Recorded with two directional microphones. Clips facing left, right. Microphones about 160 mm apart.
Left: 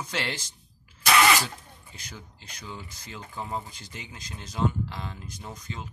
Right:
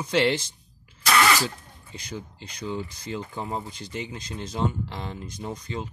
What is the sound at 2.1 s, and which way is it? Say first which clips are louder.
Speech: right 10 dB; 20° right (ahead or behind).